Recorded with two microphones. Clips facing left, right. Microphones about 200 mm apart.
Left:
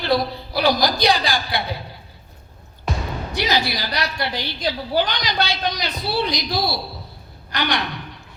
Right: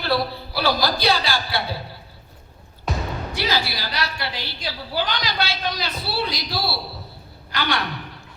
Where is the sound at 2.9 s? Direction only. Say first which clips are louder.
Even; centre (ahead or behind).